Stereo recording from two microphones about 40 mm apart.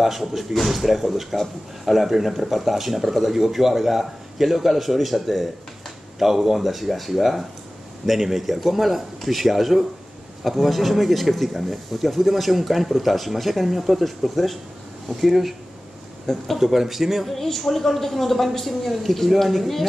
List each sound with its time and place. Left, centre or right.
0.0 s speech: centre
16.5 s speech: centre